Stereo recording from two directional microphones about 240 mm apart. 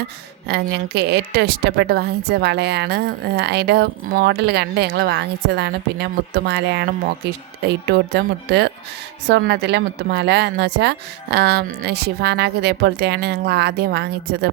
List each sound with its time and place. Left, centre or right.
0.4 s speech: right